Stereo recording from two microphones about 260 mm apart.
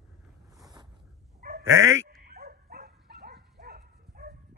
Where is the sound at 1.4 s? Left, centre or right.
Right.